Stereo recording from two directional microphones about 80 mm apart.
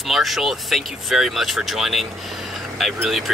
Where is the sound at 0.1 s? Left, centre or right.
Centre.